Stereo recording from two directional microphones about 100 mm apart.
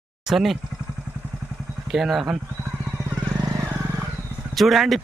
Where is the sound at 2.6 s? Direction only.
30° right (ahead or behind).